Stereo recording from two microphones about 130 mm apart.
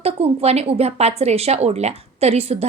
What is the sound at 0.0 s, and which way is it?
A woman's voice, 50° right (ahead or behind).